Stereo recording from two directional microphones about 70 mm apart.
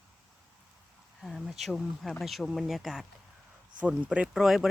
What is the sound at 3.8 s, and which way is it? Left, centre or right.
Speech, centre.